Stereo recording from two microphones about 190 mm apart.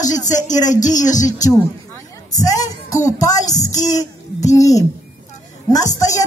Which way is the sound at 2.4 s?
20° left (ahead or behind).